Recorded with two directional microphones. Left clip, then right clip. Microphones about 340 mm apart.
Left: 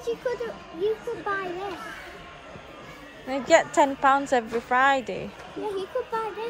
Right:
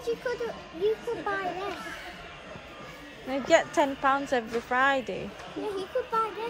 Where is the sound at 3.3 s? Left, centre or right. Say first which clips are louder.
Left 3 dB; centre.